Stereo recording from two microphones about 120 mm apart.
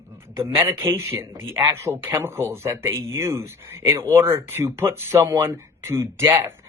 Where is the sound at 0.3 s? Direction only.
20° right (ahead or behind).